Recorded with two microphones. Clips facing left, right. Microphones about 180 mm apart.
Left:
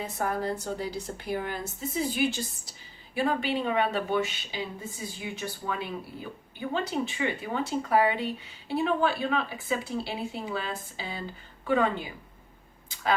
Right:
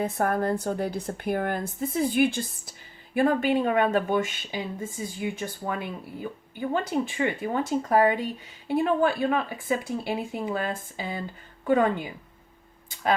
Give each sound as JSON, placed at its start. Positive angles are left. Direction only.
{"t": 0.0, "sound": "a woman's voice", "side_deg": -55}